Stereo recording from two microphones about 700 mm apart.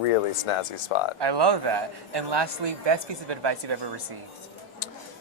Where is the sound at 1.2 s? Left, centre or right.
Right.